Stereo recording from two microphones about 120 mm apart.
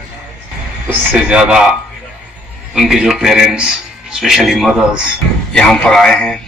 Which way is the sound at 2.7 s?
5° right (ahead or behind).